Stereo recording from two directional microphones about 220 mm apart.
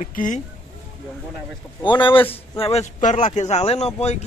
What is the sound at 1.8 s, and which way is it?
Speech, 20° left (ahead or behind).